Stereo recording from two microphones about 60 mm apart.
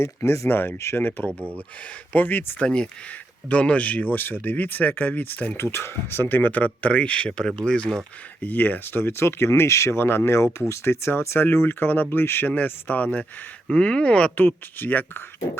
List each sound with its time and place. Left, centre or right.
0.0 s speech: left
1.0 s speech: left
1.4 s speech: right
2.1 s speech: left
2.6 s speech: centre
8.4 s speech: left
10.0 s speech: left
12.5 s speech: left
14.3 s speech: left